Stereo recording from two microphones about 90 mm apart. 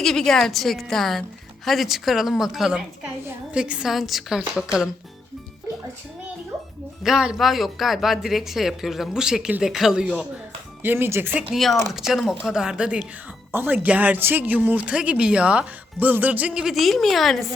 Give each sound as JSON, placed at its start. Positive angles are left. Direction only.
{"t": 0.0, "sound": "speech", "side_deg": 5}
{"t": 7.0, "sound": "speech", "side_deg": -5}
{"t": 10.8, "sound": "speech", "side_deg": -25}
{"t": 11.5, "sound": "speech", "side_deg": 0}
{"t": 13.5, "sound": "speech", "side_deg": -25}
{"t": 16.6, "sound": "speech", "side_deg": 0}